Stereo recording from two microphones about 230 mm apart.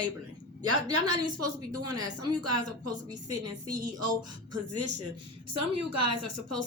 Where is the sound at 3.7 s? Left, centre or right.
Right.